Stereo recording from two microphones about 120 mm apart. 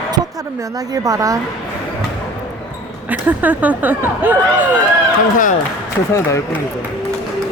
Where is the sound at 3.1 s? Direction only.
15° right (ahead or behind).